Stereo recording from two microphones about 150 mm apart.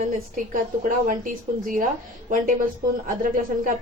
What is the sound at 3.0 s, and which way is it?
Speech, 65° right (ahead or behind).